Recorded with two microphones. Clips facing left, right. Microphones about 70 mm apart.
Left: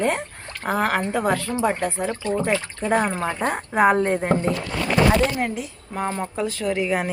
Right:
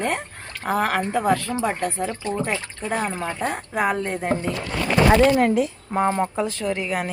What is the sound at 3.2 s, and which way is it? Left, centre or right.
Speech, left.